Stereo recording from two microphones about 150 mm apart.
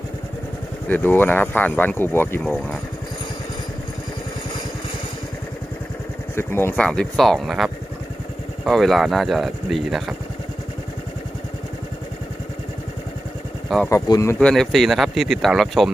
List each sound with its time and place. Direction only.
0.9 s speech: 15° left (ahead or behind)
6.3 s speech: 15° left (ahead or behind); by 10.2 s centre (ahead or behind)
13.9 s speech: 20° left (ahead or behind)
14.3 s speech: 5° left (ahead or behind)